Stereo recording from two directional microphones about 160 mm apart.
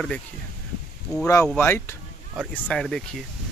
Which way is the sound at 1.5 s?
15° left (ahead or behind).